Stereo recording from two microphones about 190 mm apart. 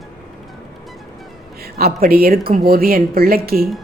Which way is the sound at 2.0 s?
50° right (ahead or behind).